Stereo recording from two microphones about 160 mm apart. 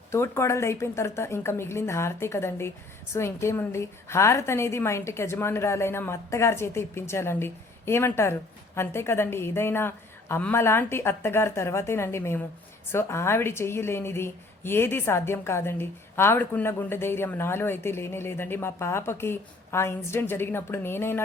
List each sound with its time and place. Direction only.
0.1 s a woman's voice: 15° left (ahead or behind)